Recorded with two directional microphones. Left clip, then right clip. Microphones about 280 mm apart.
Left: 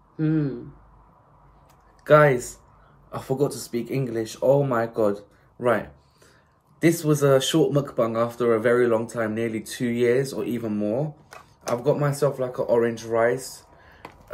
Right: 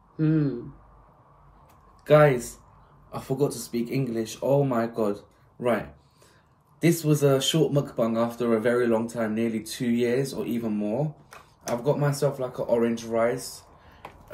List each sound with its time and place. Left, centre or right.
0.2 s speech: centre
2.0 s speech: left
14.0 s a sound: centre